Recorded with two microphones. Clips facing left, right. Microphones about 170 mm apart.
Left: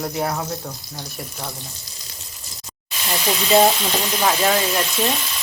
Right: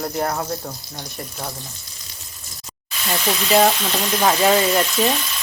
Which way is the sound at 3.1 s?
5° left (ahead or behind).